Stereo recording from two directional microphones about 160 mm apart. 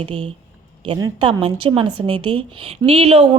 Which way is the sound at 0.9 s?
25° right (ahead or behind).